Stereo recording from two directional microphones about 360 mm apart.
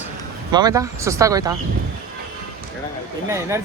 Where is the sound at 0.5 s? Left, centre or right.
Centre.